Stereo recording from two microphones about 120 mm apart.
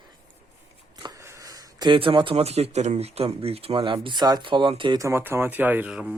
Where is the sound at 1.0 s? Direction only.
35° right (ahead or behind).